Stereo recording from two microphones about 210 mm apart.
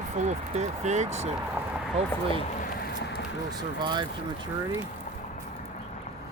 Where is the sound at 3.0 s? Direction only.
55° left (ahead or behind).